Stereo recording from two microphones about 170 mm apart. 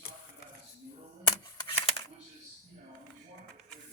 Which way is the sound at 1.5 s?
30° left (ahead or behind).